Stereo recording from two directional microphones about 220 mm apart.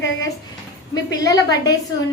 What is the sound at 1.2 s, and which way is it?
Speech, 15° left (ahead or behind).